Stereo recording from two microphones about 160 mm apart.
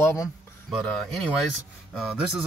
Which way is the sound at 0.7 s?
5° left (ahead or behind).